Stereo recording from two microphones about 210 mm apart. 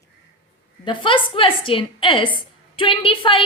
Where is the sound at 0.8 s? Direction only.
25° left (ahead or behind).